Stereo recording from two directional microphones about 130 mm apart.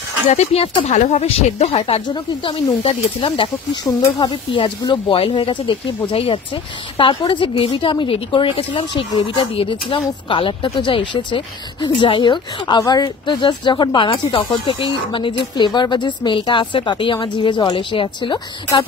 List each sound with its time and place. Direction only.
0.3 s speech: 55° left (ahead or behind)
0.9 s speech: 70° left (ahead or behind)
1.2 s speech: 50° left (ahead or behind)
2.0 s speech: 40° left (ahead or behind)